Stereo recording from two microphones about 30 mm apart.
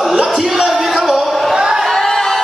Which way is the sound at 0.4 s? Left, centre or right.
Centre.